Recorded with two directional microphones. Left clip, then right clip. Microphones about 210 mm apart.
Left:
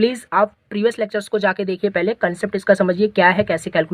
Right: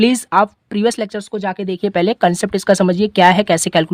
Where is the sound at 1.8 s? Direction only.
40° right (ahead or behind).